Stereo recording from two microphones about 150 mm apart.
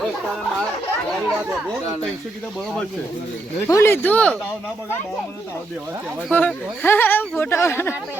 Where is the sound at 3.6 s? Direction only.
15° left (ahead or behind).